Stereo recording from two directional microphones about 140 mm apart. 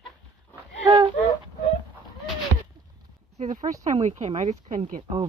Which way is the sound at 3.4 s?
60° right (ahead or behind).